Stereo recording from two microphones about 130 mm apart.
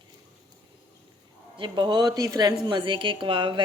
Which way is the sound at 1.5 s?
35° right (ahead or behind).